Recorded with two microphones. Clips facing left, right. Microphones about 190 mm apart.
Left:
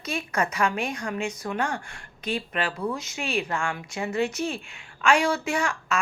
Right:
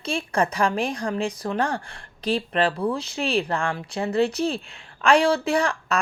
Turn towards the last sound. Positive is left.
turn(degrees=-35)  # may be behind; listen again after turning